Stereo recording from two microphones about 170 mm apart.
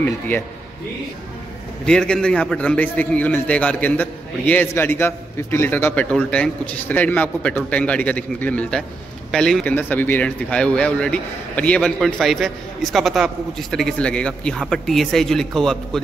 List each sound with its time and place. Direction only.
1.9 s a man's voice: 5° left (ahead or behind)